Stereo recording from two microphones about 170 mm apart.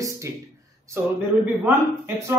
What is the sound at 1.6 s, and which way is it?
Speech, 15° right (ahead or behind).